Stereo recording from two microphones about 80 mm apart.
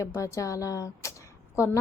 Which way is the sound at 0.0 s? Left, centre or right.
Left.